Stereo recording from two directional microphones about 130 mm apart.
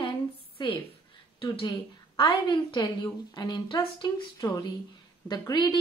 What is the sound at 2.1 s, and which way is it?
A woman's voice, 40° left (ahead or behind).